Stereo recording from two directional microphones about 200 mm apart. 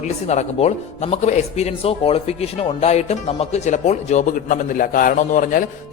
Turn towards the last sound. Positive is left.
turn(degrees=40)  # may be behind; listen again after turning